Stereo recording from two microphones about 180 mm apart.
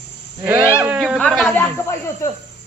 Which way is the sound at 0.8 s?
5° right (ahead or behind).